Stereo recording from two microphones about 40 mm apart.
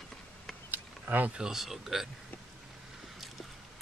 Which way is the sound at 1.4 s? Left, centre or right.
Centre.